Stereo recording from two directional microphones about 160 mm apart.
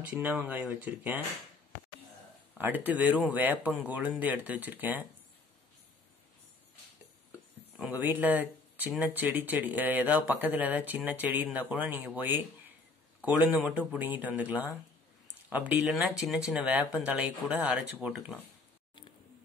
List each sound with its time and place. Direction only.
0.2 s speech: 10° right (ahead or behind)
2.5 s speech: 10° right (ahead or behind)
7.7 s a sound: centre (ahead or behind)
8.0 s speech: 10° right (ahead or behind)